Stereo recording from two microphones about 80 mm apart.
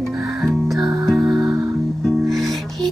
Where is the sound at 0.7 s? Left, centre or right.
Right.